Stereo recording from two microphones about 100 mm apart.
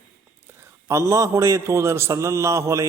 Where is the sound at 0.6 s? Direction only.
30° right (ahead or behind).